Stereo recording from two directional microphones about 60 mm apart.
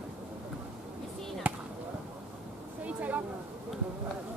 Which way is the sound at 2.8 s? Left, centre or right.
Right.